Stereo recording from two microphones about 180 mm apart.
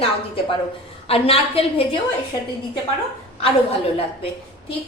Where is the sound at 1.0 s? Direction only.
35° left (ahead or behind).